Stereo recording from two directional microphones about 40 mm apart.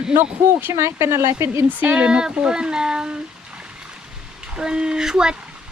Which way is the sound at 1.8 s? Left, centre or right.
Right.